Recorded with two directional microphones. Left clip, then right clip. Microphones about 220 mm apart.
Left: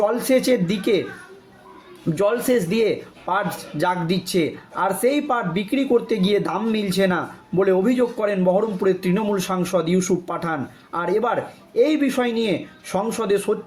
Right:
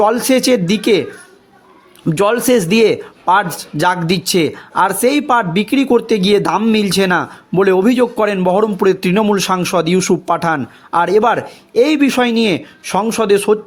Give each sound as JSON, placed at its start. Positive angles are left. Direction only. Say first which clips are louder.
{"t": 0.0, "sound": "speech", "louder": "right 6 dB", "side_deg": -45}
{"t": 2.0, "sound": "speech", "louder": "right 7 dB", "side_deg": -45}